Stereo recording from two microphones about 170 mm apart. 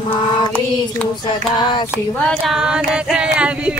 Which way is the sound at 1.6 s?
25° left (ahead or behind).